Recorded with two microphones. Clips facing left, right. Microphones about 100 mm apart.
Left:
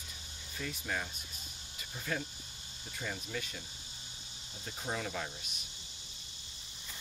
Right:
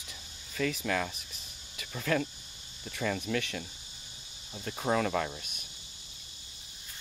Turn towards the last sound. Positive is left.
turn(degrees=-65)  # may be behind; listen again after turning